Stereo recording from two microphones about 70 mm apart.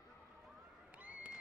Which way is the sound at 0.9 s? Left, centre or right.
Right.